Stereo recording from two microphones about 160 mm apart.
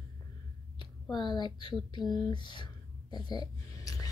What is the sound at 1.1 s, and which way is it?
Speech, 30° left (ahead or behind).